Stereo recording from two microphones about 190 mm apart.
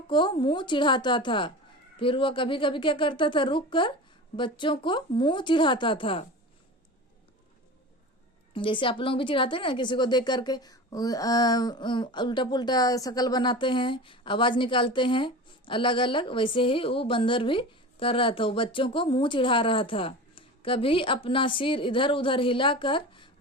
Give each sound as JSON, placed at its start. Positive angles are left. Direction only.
{"t": 0.1, "sound": "a woman's voice", "side_deg": 25}
{"t": 8.5, "sound": "a woman's voice", "side_deg": 25}